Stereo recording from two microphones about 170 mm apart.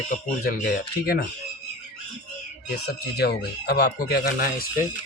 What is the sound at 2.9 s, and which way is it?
Speech, 70° left (ahead or behind).